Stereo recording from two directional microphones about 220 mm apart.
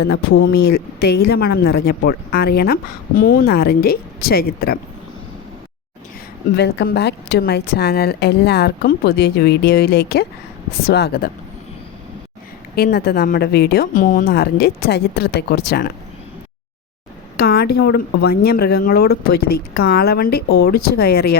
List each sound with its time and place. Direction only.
0.0 s a woman's voice: 45° left (ahead or behind)
6.6 s a woman's voice: 50° left (ahead or behind)
12.7 s a woman's voice: 45° left (ahead or behind)
17.3 s a woman's voice: 45° left (ahead or behind)